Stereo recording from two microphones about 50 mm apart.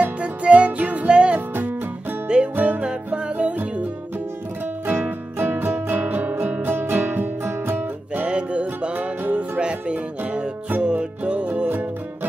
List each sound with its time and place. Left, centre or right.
0.0 s music: right
1.5 s music: right
2.2 s music: centre
2.5 s music: right
4.8 s music: right
8.3 s music: right
8.9 s music: right
9.3 s music: right